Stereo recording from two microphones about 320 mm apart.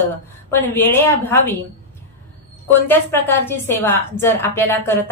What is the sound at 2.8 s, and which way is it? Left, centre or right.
A woman's voice, centre.